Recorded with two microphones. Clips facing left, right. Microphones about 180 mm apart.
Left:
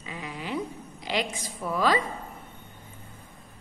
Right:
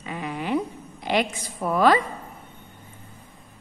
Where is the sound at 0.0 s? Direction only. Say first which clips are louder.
Right 6 dB; 60° right (ahead or behind).